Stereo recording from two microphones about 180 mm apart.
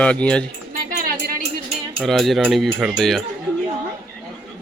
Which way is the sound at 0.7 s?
55° right (ahead or behind).